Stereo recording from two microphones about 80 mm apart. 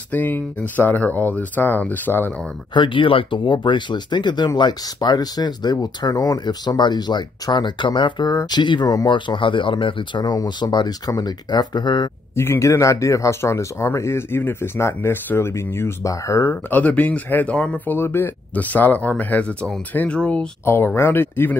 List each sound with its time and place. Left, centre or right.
0.1 s speech: left
2.7 s speech: left
8.3 s speech: left
12.4 s speech: left
16.7 s speech: centre
20.6 s speech: left